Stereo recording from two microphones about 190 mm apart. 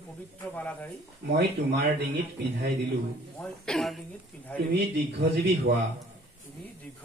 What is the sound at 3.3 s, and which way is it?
Speech, 5° left (ahead or behind).